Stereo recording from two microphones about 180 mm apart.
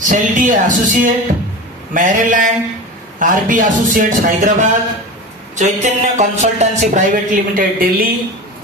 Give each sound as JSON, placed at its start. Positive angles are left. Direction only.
{"t": 0.0, "sound": "speech", "side_deg": -45}